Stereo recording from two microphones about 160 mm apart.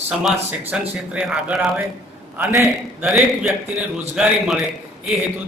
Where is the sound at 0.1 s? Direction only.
5° right (ahead or behind).